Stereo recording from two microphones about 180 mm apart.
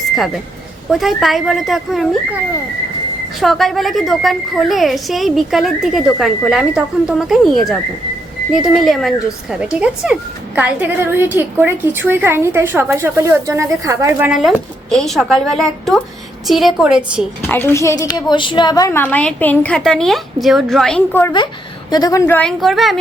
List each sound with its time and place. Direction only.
0.9 s a woman's voice: centre (ahead or behind)
3.4 s a woman's voice: centre (ahead or behind)
17.4 s a woman's voice: 10° left (ahead or behind)
21.3 s a woman's voice: 25° left (ahead or behind)
22.3 s a woman's voice: 5° left (ahead or behind)